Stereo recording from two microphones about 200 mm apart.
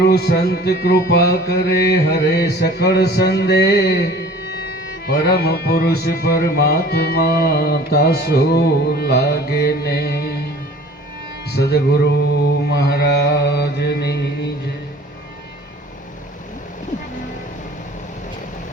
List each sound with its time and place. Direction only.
0.0 s music: 55° left (ahead or behind)
11.4 s music: 55° left (ahead or behind)